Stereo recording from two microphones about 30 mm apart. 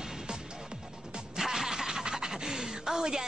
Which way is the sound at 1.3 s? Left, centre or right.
Centre.